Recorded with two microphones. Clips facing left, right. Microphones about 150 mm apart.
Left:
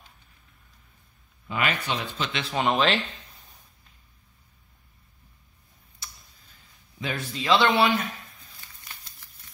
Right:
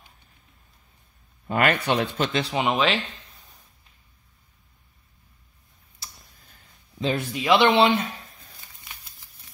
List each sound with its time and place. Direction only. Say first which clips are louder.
1.5 s speech: right 6 dB; 55° right (ahead or behind)
2.5 s speech: left 3 dB; 5° right (ahead or behind)
6.0 s a sound: even; 35° right (ahead or behind)
7.0 s speech: right 7 dB; 30° right (ahead or behind)
7.3 s speech: right 3 dB; 15° right (ahead or behind)